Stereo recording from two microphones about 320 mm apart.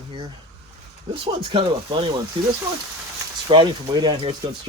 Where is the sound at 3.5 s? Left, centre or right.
Centre.